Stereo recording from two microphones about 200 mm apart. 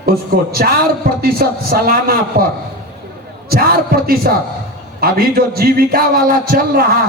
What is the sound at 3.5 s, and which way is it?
A man's voice, 50° right (ahead or behind).